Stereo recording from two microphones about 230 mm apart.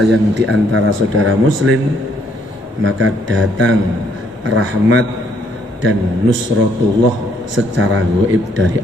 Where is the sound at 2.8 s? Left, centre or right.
Right.